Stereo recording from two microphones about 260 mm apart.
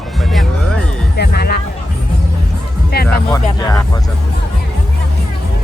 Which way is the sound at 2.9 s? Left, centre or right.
Left.